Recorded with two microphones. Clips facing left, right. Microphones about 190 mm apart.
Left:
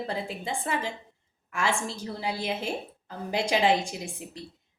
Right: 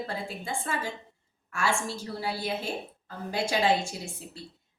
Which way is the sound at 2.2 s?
20° left (ahead or behind).